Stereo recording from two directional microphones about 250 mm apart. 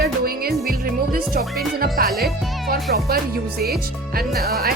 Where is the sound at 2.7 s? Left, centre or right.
Right.